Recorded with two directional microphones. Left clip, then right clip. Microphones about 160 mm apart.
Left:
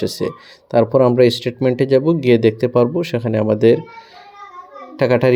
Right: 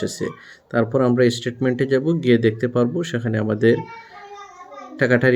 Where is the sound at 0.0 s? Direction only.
15° left (ahead or behind).